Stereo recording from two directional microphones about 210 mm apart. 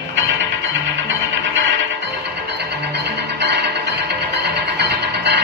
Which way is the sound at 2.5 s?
55° right (ahead or behind).